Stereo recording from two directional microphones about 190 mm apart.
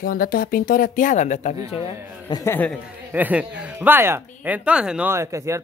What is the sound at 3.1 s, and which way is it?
Speech, 10° right (ahead or behind).